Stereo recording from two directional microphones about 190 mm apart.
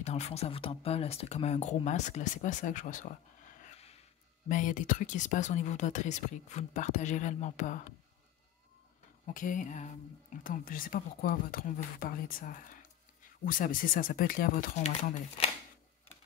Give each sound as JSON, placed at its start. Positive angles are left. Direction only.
{"t": 0.0, "sound": "speech", "side_deg": 35}
{"t": 4.5, "sound": "speech", "side_deg": 45}
{"t": 9.2, "sound": "speech", "side_deg": 45}